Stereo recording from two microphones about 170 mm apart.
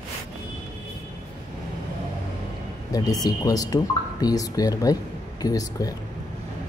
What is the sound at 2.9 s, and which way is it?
Speech, 20° left (ahead or behind).